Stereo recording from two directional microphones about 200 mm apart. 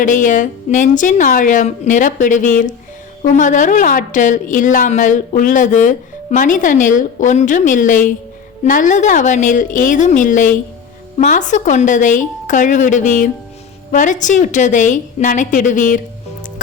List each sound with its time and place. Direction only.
0.0 s a woman's voice: 40° left (ahead or behind)